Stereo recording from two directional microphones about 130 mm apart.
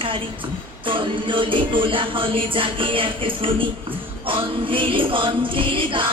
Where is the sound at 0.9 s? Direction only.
40° right (ahead or behind).